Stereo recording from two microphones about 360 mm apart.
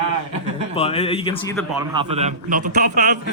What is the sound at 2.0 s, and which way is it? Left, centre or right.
A man's voice, centre.